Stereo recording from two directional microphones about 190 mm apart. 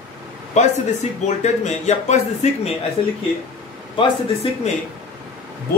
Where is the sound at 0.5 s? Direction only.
35° left (ahead or behind).